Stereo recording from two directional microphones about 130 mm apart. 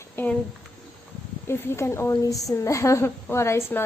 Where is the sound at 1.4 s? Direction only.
20° left (ahead or behind).